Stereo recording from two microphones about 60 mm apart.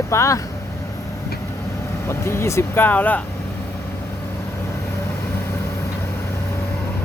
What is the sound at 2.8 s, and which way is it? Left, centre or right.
Speech, left.